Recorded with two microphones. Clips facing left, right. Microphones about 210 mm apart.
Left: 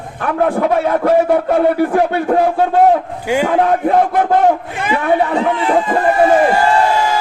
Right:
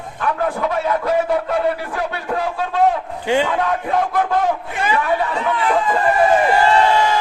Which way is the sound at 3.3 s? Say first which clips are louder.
Left 1 dB; 10° left (ahead or behind).